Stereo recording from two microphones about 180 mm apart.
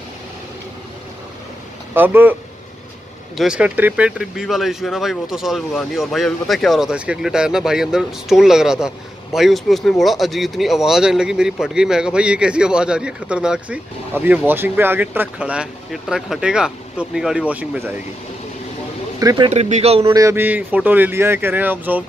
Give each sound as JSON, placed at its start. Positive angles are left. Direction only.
{"t": 2.0, "sound": "speech", "side_deg": -10}
{"t": 3.3, "sound": "speech", "side_deg": -5}
{"t": 19.1, "sound": "speech", "side_deg": -20}
{"t": 19.5, "sound": "speech", "side_deg": -40}
{"t": 20.0, "sound": "speech", "side_deg": -15}